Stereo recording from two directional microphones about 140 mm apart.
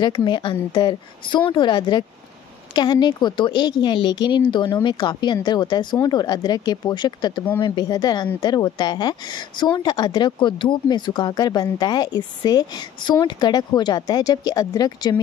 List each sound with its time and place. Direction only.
0.0 s speech: 30° left (ahead or behind)